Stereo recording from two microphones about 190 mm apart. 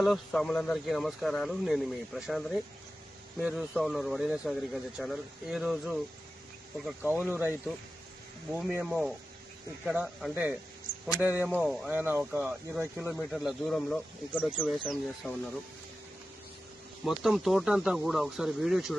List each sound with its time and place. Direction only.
0.0 s speech: centre (ahead or behind)
8.7 s speech: centre (ahead or behind)
17.0 s speech: centre (ahead or behind)